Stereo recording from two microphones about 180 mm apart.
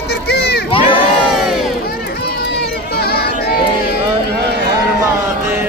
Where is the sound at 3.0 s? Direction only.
60° left (ahead or behind).